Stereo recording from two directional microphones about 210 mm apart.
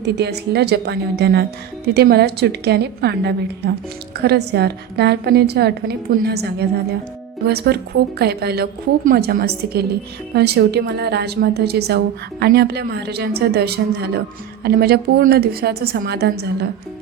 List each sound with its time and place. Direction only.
0.0 s a woman's voice: 50° right (ahead or behind)